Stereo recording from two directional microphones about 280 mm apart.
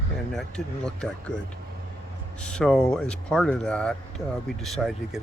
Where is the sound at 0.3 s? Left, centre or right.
Centre.